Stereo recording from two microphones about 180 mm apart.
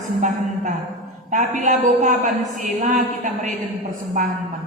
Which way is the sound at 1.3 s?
45° right (ahead or behind).